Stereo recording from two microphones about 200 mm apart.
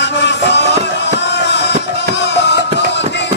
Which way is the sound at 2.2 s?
60° left (ahead or behind).